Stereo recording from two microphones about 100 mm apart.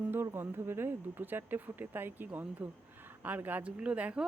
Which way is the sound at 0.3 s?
25° right (ahead or behind).